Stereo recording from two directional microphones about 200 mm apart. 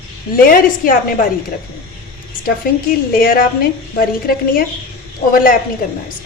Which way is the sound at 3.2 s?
45° left (ahead or behind).